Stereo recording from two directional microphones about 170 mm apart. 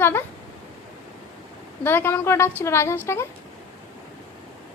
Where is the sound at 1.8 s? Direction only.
10° left (ahead or behind).